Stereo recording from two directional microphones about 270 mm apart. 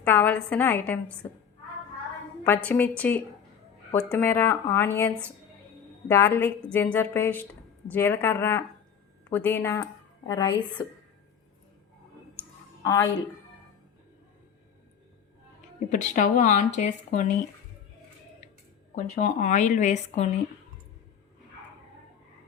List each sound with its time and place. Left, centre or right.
0.0 s a woman's voice: centre
2.6 s a woman's voice: centre
12.8 s a woman's voice: centre
15.9 s speech: left
18.9 s speech: left